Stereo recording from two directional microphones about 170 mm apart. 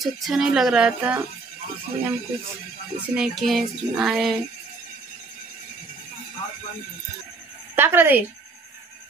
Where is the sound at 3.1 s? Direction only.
Centre (ahead or behind).